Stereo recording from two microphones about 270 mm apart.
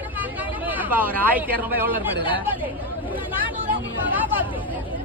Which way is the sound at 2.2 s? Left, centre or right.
Centre.